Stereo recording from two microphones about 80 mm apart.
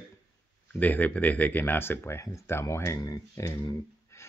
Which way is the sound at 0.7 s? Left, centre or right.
Left.